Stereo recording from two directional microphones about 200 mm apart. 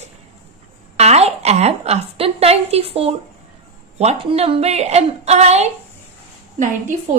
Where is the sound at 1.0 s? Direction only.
30° right (ahead or behind).